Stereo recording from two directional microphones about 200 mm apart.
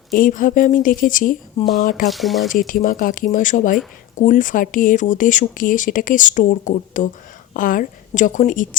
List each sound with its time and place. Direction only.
0.1 s a woman's voice: 40° left (ahead or behind)
2.0 s speech: centre (ahead or behind)
2.5 s a woman's voice: 40° left (ahead or behind)